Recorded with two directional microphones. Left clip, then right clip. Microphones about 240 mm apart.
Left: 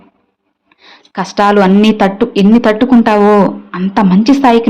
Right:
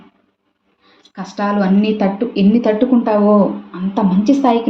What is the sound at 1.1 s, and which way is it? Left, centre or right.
A woman's voice, left.